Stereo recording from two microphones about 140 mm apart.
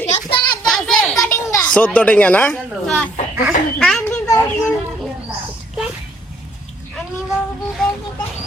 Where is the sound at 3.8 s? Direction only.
5° left (ahead or behind).